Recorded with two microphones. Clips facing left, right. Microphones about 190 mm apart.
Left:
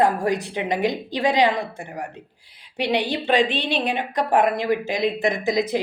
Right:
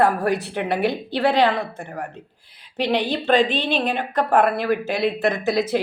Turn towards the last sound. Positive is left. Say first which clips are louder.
# right 1 dB
turn(degrees=15)  # may be behind; listen again after turning